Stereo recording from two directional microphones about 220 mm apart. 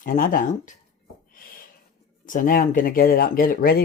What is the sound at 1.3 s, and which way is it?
Owl, 40° left (ahead or behind).